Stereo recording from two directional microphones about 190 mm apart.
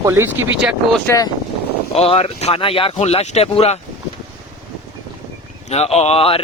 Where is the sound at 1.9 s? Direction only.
30° left (ahead or behind).